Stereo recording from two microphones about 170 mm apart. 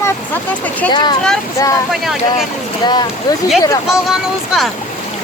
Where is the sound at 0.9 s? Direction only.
25° left (ahead or behind).